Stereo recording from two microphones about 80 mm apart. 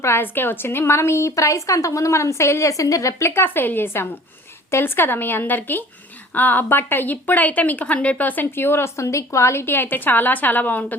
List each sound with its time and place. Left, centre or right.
0.0 s a woman's voice: left